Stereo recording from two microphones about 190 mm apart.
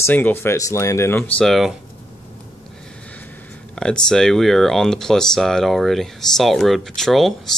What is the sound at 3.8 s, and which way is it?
Speech, 5° left (ahead or behind).